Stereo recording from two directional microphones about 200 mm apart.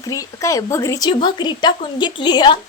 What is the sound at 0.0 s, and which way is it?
A woman's voice, 15° left (ahead or behind).